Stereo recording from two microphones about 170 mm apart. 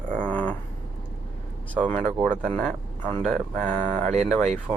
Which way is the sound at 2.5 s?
5° left (ahead or behind).